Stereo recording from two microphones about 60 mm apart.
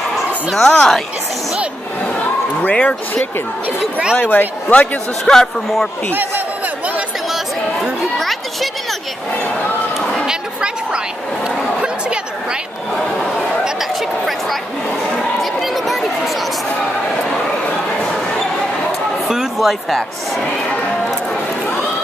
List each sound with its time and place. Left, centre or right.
0.6 s a man's voice: centre
2.6 s speech: left
3.8 s speech: centre
4.2 s speech: left
5.2 s a man's voice: centre
8.2 s a sound: centre
10.2 s a sound: centre
15.6 s chatter: centre
19.2 s speech: centre